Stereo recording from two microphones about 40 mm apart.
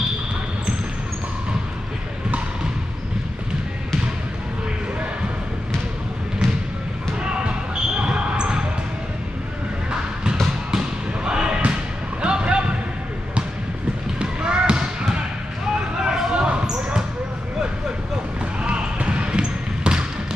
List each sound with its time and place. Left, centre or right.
6.4 s basketball bounce: centre
7.7 s basketball bounce: right
10.7 s basketball bounce: centre
12.2 s a sound: right
14.1 s basketball bounce: right
16.0 s a sound: centre
18.6 s basketball bounce: right